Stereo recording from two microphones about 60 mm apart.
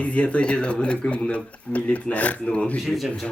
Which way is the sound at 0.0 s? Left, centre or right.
Left.